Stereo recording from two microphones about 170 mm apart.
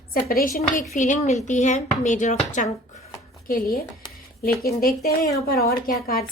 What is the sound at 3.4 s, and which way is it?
Speech, 60° left (ahead or behind).